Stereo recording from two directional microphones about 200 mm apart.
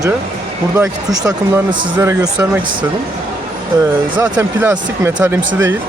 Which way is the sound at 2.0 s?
10° right (ahead or behind).